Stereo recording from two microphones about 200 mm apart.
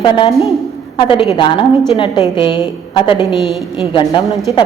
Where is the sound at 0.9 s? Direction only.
25° left (ahead or behind).